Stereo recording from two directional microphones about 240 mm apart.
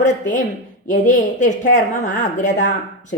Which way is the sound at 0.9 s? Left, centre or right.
Left.